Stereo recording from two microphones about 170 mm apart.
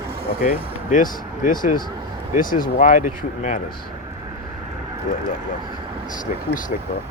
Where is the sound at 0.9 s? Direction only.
50° left (ahead or behind).